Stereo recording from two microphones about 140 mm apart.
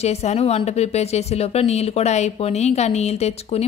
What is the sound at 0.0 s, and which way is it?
Speech, 50° left (ahead or behind).